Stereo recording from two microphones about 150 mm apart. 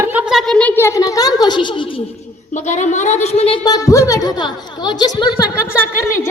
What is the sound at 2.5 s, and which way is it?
A woman's voice, 50° left (ahead or behind).